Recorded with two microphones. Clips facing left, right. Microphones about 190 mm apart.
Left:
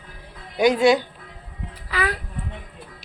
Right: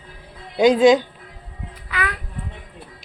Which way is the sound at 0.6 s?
20° right (ahead or behind).